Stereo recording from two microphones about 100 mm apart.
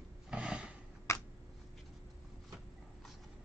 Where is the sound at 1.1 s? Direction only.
25° left (ahead or behind).